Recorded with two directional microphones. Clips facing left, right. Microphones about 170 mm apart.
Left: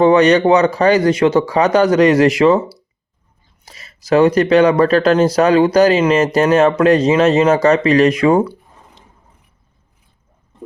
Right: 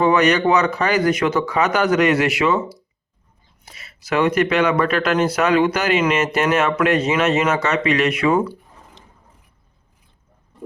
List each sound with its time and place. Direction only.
0.0 s speech: 30° left (ahead or behind)